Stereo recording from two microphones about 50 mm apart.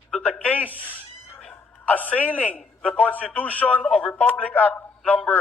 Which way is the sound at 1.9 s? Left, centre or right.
Left.